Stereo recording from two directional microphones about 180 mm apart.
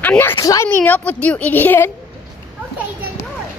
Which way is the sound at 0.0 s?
10° left (ahead or behind).